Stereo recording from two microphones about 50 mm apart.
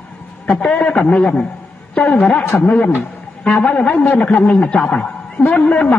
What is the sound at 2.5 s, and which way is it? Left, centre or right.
A man's voice, left.